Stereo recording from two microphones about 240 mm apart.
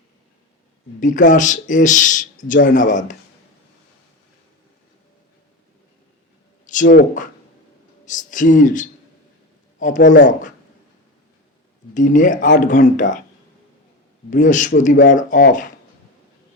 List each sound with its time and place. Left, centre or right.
0.9 s speech: left
6.7 s speech: left
11.9 s speech: left
14.3 s speech: left